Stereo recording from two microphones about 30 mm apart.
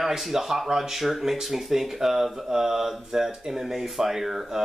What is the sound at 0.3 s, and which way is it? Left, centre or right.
Speech, centre.